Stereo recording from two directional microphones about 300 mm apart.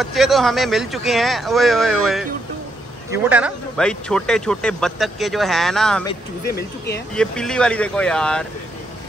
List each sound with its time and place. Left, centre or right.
0.0 s speech: centre
6.4 s speech: left
7.2 s speech: centre